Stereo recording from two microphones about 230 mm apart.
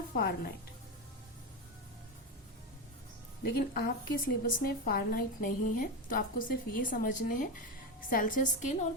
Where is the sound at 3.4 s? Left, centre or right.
Left.